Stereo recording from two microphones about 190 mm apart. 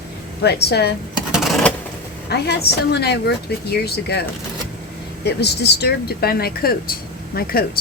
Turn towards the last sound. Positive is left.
turn(degrees=55)  # may be behind; listen again after turning